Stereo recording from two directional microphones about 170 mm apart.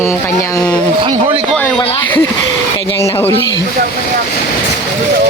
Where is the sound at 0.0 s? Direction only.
15° left (ahead or behind).